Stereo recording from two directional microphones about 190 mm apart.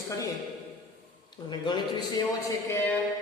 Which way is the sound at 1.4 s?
25° left (ahead or behind).